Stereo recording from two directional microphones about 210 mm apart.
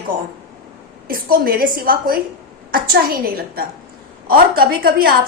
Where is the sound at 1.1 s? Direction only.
45° right (ahead or behind).